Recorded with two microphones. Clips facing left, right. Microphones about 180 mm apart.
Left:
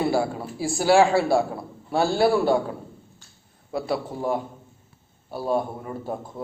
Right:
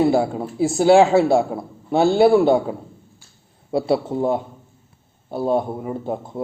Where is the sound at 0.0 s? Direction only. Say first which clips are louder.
Right 6 dB; 20° right (ahead or behind).